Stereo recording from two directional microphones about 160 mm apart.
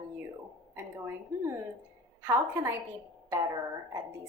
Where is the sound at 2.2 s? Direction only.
15° right (ahead or behind).